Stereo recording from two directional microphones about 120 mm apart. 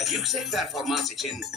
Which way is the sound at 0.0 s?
Centre (ahead or behind).